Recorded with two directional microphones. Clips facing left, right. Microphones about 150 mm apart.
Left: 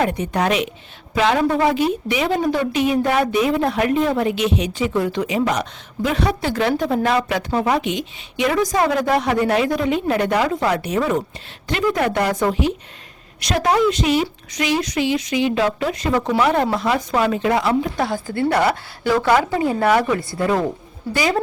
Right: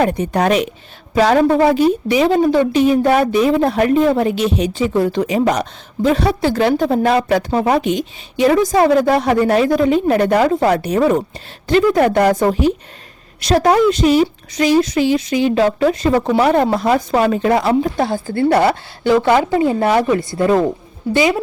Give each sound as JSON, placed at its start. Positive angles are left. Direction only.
{"t": 0.0, "sound": "a woman's voice", "side_deg": -35}